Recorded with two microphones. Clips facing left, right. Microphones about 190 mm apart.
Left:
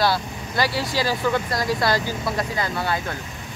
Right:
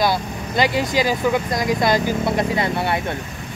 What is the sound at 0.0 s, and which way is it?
Speech, 20° right (ahead or behind).